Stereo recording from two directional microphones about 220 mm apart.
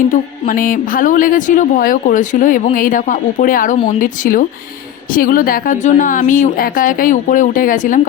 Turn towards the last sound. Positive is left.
turn(degrees=35)  # may be behind; listen again after turning